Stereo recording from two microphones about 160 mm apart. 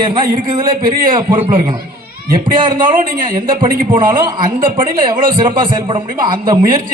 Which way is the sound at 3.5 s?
30° right (ahead or behind).